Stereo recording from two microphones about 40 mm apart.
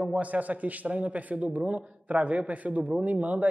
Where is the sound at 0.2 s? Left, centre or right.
Right.